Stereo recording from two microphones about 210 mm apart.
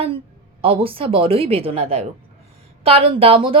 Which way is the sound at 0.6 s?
25° right (ahead or behind).